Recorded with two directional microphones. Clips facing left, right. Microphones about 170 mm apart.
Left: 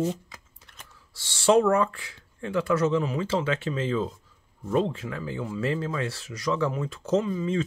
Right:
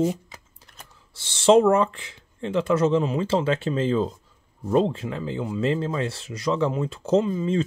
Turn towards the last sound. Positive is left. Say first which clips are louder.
# right 4 dB
turn(degrees=-30)  # may be behind; listen again after turning